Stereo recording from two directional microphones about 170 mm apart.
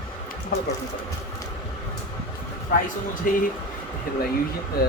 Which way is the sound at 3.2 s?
55° left (ahead or behind).